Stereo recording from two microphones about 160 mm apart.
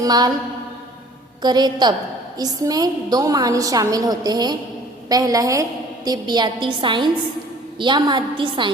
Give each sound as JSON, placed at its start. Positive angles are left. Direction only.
{"t": 0.0, "sound": "a woman's voice", "side_deg": -25}
{"t": 1.4, "sound": "a woman's voice", "side_deg": -25}